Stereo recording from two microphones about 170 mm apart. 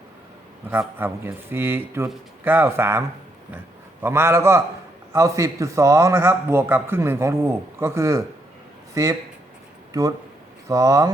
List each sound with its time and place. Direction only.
0.7 s a man's voice: 10° right (ahead or behind)
4.0 s a man's voice: 15° right (ahead or behind)